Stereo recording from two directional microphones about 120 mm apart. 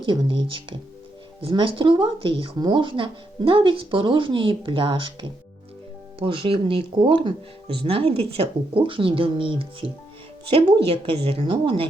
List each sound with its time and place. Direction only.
0.0 s speech: 40° right (ahead or behind)